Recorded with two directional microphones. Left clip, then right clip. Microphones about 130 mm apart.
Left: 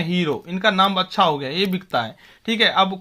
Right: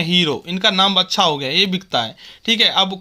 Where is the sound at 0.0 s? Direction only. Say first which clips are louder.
Right 6 dB; 35° right (ahead or behind).